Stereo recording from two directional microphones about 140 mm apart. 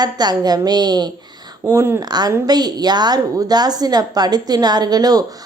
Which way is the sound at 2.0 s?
30° right (ahead or behind).